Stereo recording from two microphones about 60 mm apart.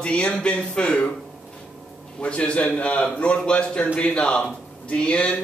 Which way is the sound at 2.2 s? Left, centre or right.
Centre.